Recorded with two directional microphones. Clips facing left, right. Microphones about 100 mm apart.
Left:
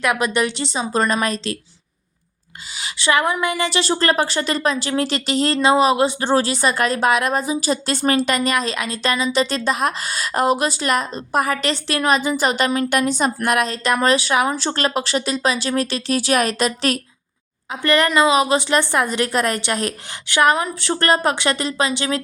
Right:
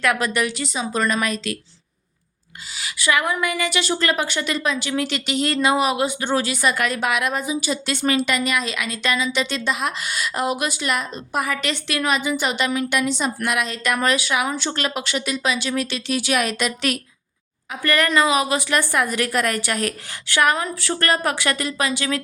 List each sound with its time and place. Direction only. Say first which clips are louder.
0.0 s a woman's voice: left 2 dB; 20° left (ahead or behind)
2.7 s a woman's voice: left 2 dB; 25° left (ahead or behind)
17.7 s a woman's voice: left 3 dB; 25° left (ahead or behind)